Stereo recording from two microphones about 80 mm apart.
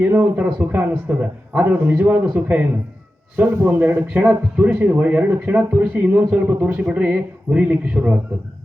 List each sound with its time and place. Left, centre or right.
0.0 s a man's voice: right